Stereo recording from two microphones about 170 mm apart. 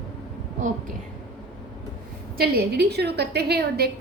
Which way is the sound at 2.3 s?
65° right (ahead or behind).